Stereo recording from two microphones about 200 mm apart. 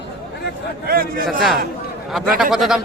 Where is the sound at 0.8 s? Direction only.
50° right (ahead or behind).